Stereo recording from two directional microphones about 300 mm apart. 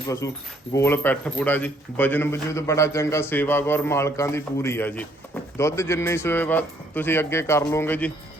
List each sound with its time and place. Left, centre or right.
0.7 s a man's voice: centre